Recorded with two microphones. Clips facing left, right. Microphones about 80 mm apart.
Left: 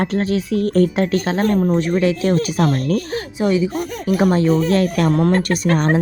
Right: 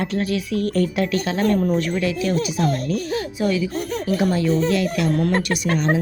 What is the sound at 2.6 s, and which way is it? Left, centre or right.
Speech, left.